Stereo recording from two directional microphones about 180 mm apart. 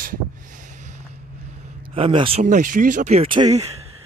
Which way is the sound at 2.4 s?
45° right (ahead or behind).